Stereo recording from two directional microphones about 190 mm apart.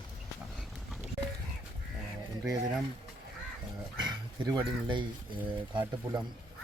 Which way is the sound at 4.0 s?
20° right (ahead or behind).